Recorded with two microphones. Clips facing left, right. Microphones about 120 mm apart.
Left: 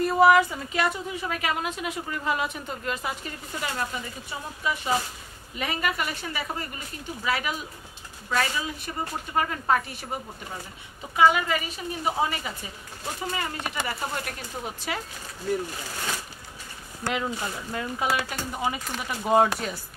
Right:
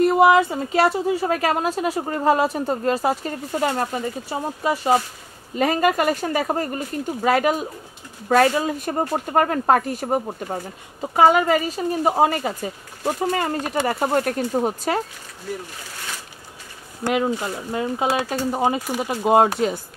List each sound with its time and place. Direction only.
0.0 s a sound: 25° right (ahead or behind)
0.5 s a woman's voice: 35° right (ahead or behind)
17.2 s speech: 30° right (ahead or behind)
18.9 s speech: 45° right (ahead or behind)
19.2 s speech: 25° right (ahead or behind)